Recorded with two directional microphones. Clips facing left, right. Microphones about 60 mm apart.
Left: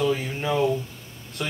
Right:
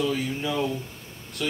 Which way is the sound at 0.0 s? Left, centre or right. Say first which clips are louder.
Left 2 dB; left.